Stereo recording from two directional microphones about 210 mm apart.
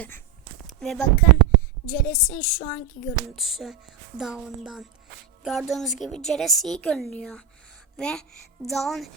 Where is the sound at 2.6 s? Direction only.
15° left (ahead or behind).